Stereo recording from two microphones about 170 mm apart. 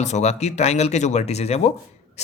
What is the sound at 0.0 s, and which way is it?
Speech, 40° left (ahead or behind).